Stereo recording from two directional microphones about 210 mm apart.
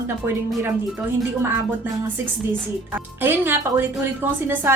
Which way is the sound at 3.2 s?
10° right (ahead or behind).